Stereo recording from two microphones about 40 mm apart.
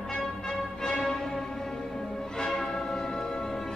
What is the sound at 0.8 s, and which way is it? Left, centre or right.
Music, centre.